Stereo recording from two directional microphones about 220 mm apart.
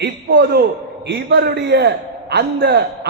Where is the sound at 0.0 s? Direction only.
50° right (ahead or behind).